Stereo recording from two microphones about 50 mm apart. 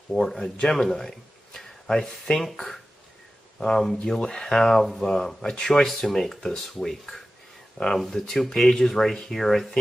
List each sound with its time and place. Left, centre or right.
0.1 s speech: centre